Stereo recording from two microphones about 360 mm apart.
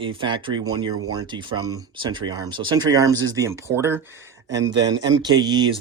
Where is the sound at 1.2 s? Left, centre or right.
Centre.